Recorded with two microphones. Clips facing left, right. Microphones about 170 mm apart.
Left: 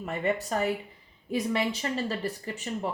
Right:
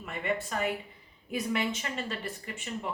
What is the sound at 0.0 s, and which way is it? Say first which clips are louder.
Speech: left 4 dB; 40° left (ahead or behind).